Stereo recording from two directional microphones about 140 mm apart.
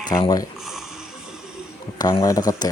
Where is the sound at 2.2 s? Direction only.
25° left (ahead or behind).